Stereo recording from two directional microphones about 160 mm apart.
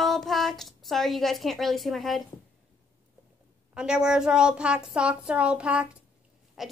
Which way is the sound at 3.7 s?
5° right (ahead or behind).